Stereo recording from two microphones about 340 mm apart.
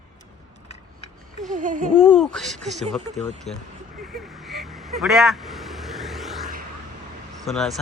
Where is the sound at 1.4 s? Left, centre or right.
Right.